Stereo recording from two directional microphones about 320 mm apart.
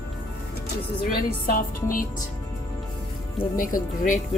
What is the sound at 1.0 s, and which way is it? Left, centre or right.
Speech, left.